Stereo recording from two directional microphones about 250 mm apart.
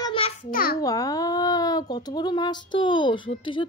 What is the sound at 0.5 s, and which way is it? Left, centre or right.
Speech, left.